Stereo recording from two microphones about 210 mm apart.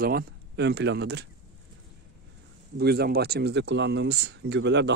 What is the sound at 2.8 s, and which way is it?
Speech, 50° right (ahead or behind).